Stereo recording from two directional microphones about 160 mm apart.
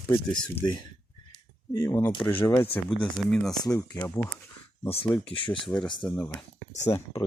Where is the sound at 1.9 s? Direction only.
15° left (ahead or behind).